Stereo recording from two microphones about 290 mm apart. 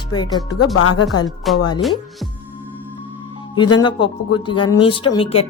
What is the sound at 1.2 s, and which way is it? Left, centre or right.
Speech, centre.